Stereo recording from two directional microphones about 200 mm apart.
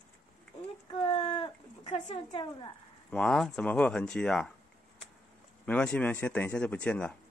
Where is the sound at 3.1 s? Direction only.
5° left (ahead or behind).